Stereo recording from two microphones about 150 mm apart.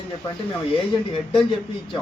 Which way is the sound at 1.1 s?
35° left (ahead or behind).